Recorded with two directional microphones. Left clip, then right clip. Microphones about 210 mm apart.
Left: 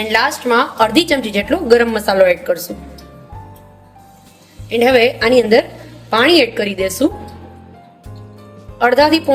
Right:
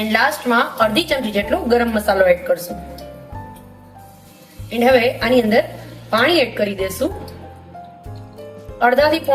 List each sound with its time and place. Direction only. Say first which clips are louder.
0.1 s a woman's voice: left 2 dB; 45° left (ahead or behind)
4.8 s a woman's voice: left 3 dB; 45° left (ahead or behind)
8.8 s a woman's voice: left 3 dB; 45° left (ahead or behind)